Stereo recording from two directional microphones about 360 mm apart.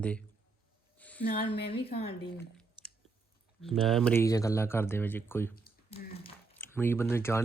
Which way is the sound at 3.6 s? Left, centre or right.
Centre.